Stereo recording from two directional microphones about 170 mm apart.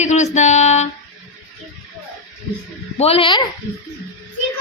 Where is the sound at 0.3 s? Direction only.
40° left (ahead or behind).